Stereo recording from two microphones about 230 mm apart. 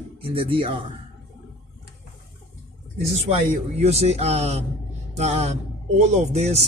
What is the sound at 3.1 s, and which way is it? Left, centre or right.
A man's voice, right.